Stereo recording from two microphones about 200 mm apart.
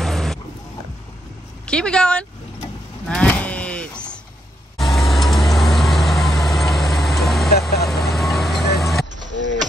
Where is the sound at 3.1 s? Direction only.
5° left (ahead or behind).